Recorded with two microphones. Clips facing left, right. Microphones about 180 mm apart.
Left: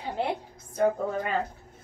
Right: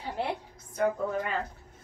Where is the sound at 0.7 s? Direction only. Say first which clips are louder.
Left 3 dB; 30° left (ahead or behind).